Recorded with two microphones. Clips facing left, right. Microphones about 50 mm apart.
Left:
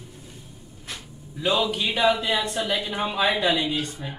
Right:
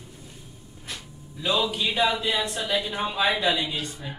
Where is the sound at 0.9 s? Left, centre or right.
Centre.